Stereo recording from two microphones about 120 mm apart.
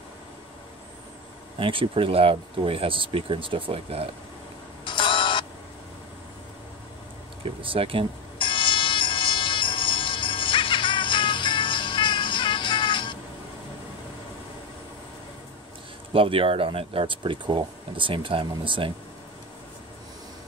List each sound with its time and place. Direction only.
1.6 s speech: 45° right (ahead or behind)
4.8 s music: 45° left (ahead or behind)
7.4 s speech: 50° right (ahead or behind)
8.4 s music: 45° left (ahead or behind)
16.1 s speech: 50° right (ahead or behind)